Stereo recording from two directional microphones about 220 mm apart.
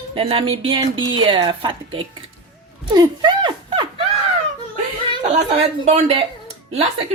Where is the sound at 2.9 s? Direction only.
20° right (ahead or behind).